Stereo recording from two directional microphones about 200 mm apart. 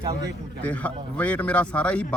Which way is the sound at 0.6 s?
10° left (ahead or behind).